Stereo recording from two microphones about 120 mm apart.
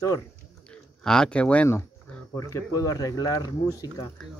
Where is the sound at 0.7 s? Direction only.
5° left (ahead or behind).